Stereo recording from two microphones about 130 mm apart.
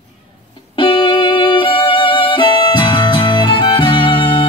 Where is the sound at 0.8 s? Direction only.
40° left (ahead or behind).